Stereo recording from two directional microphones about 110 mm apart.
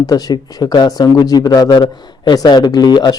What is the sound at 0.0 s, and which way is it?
Speech, 35° left (ahead or behind).